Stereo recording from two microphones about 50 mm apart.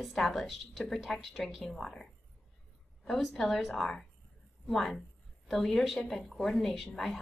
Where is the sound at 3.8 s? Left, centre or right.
Centre.